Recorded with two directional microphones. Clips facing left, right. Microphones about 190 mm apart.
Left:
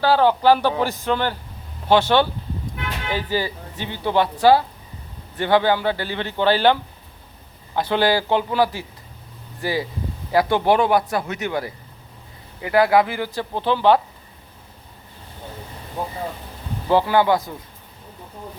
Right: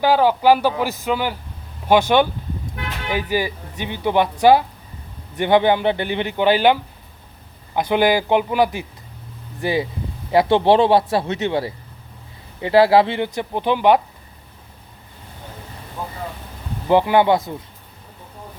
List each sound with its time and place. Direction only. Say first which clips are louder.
0.0 s speech: right 1 dB; 10° right (ahead or behind)
7.8 s speech: right 2 dB; 15° right (ahead or behind)
16.9 s speech: right 2 dB; 20° right (ahead or behind)